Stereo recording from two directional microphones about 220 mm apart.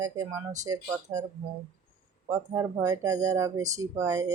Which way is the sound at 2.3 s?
15° right (ahead or behind).